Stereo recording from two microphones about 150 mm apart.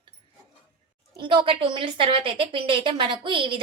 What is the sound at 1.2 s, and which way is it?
A woman's voice, 35° right (ahead or behind).